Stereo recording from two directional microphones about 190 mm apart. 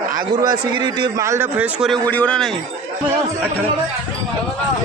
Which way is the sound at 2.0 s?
10° left (ahead or behind).